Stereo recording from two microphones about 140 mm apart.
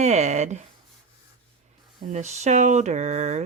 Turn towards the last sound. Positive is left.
turn(degrees=-55)  # may be behind; listen again after turning